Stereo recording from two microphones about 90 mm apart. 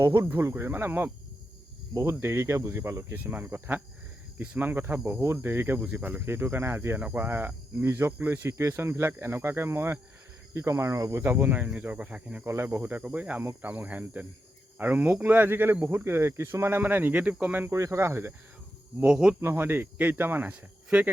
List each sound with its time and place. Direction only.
0.0 s speech: 25° right (ahead or behind)
1.9 s speech: 40° right (ahead or behind)
2.2 s speech: 30° right (ahead or behind)
12.5 s speech: 25° right (ahead or behind)
17.7 s speech: 35° right (ahead or behind)
19.0 s speech: 10° right (ahead or behind)
19.4 s speech: 25° right (ahead or behind)